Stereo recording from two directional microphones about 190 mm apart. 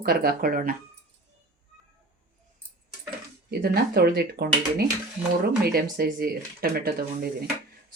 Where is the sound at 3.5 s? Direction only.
55° right (ahead or behind).